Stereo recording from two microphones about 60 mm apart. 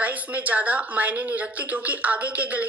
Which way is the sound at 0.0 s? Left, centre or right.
Right.